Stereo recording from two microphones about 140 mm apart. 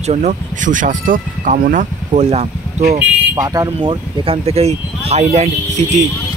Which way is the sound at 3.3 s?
25° right (ahead or behind).